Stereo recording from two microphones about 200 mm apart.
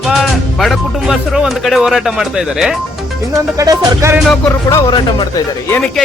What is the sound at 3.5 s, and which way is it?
Music, 15° right (ahead or behind).